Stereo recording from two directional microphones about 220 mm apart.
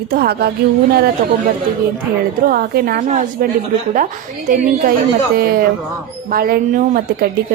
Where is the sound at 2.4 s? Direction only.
45° right (ahead or behind).